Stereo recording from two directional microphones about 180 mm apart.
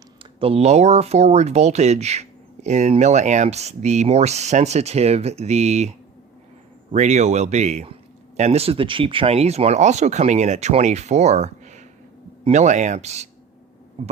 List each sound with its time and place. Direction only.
0.2 s speech: 30° right (ahead or behind)
6.9 s speech: 40° right (ahead or behind)